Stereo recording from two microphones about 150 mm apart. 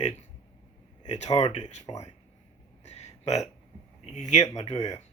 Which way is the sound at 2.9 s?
50° left (ahead or behind).